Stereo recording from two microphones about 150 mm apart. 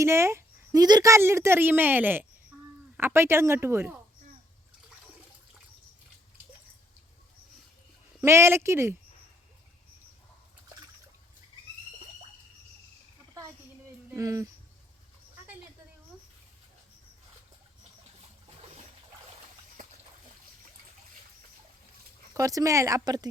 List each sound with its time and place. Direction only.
0.0 s a woman's voice: 20° right (ahead or behind)
8.2 s a woman's voice: 15° right (ahead or behind)
14.1 s speech: 20° right (ahead or behind)
18.4 s boat: 45° right (ahead or behind)
22.4 s speech: 20° right (ahead or behind)